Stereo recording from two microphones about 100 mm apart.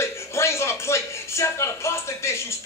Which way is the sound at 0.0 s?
25° left (ahead or behind).